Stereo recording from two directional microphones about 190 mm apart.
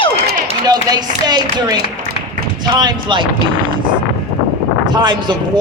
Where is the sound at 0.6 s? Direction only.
20° right (ahead or behind).